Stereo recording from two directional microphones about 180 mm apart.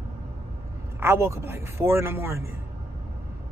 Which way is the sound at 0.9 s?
15° right (ahead or behind).